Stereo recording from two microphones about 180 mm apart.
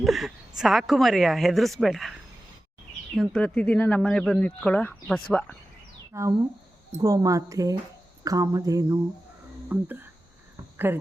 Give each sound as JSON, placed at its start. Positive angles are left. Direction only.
{"t": 0.0, "sound": "a woman's voice", "side_deg": 0}
{"t": 3.2, "sound": "a woman's voice", "side_deg": 5}
{"t": 6.1, "sound": "a woman's voice", "side_deg": -15}